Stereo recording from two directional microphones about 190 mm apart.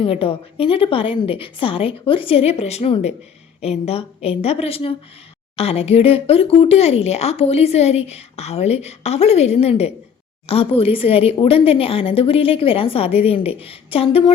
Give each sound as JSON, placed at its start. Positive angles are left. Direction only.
{"t": 0.0, "sound": "speech", "side_deg": 30}